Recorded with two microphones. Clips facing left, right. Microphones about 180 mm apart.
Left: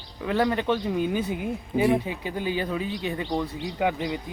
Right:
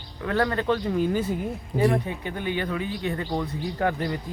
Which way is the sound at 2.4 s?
30° left (ahead or behind).